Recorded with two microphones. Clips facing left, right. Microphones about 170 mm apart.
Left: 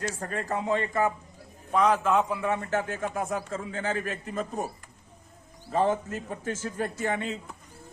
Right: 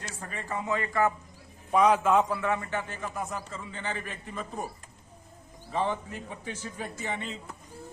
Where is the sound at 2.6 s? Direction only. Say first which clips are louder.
Left 5 dB; 40° left (ahead or behind).